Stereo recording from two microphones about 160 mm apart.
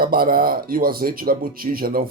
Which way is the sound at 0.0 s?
65° right (ahead or behind).